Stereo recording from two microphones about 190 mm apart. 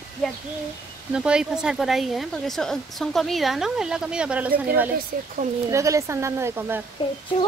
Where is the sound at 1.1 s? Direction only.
5° right (ahead or behind).